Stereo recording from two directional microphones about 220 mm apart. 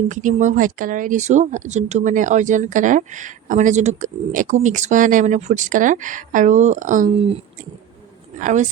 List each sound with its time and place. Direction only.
0.1 s speech: 35° right (ahead or behind)
8.4 s speech: 35° right (ahead or behind)